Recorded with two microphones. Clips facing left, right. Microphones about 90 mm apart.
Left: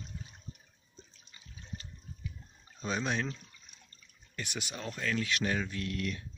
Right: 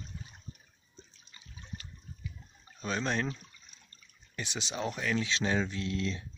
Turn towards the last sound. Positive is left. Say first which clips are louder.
# right 2 dB
turn(degrees=-25)  # may be behind; listen again after turning